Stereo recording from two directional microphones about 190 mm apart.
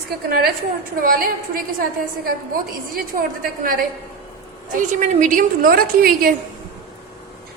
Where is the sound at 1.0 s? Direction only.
50° right (ahead or behind).